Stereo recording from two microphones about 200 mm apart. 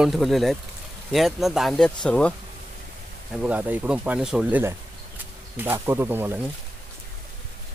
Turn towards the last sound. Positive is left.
turn(degrees=-10)  # may be behind; listen again after turning